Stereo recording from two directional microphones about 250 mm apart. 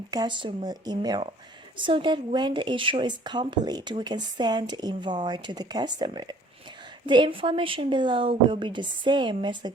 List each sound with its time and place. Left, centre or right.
0.1 s a woman's voice: centre